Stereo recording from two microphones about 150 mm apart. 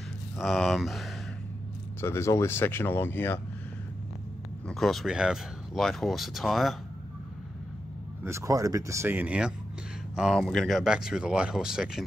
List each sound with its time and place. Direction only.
0.4 s speech: centre (ahead or behind)
2.0 s speech: 20° left (ahead or behind)
4.6 s speech: centre (ahead or behind)
8.2 s speech: 20° right (ahead or behind)